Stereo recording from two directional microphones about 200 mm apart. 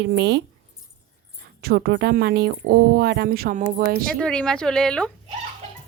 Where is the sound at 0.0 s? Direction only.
60° right (ahead or behind).